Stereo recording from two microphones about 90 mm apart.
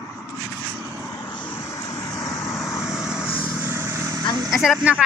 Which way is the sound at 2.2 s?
40° left (ahead or behind).